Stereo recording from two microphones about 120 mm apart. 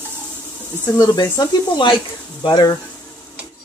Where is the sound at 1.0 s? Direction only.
35° left (ahead or behind).